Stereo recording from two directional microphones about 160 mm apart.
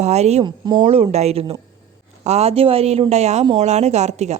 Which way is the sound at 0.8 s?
40° right (ahead or behind).